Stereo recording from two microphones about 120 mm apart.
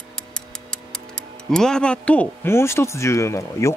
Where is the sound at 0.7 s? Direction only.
5° left (ahead or behind).